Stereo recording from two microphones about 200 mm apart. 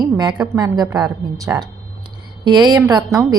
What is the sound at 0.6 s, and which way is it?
A woman's voice, 20° right (ahead or behind).